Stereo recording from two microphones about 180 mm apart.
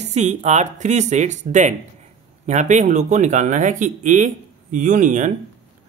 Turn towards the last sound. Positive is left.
turn(degrees=-45)  # may be behind; listen again after turning